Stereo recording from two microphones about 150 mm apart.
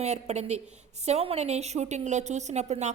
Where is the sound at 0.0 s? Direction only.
45° right (ahead or behind).